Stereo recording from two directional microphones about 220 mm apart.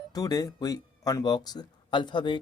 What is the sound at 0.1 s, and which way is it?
Speech, 15° left (ahead or behind).